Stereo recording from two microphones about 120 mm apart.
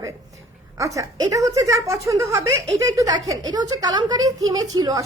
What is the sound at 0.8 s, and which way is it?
Speech, 25° right (ahead or behind).